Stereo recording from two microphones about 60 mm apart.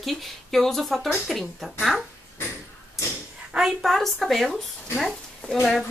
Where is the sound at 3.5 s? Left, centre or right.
Centre.